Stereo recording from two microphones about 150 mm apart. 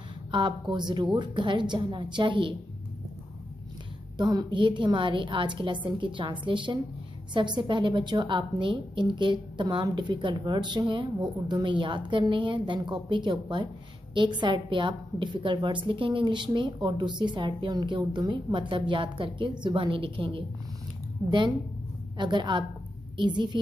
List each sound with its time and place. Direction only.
0.3 s a woman's voice: 35° right (ahead or behind)
4.2 s a woman's voice: 25° right (ahead or behind)